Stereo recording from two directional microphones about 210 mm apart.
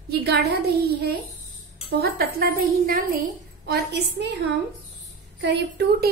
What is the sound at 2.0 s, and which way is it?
A woman's voice, 45° right (ahead or behind).